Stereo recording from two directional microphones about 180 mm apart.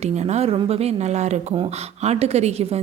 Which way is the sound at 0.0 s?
40° right (ahead or behind).